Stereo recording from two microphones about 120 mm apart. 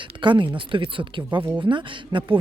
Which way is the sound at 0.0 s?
45° right (ahead or behind).